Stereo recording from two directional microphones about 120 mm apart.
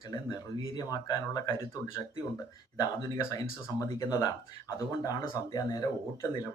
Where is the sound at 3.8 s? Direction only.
25° left (ahead or behind).